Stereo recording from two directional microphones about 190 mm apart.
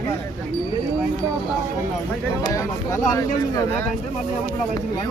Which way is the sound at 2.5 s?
15° left (ahead or behind).